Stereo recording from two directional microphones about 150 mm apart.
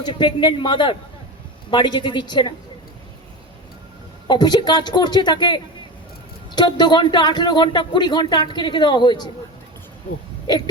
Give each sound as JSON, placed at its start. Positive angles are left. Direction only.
{"t": 0.0, "sound": "a man's voice", "side_deg": 30}
{"t": 4.3, "sound": "speech", "side_deg": 30}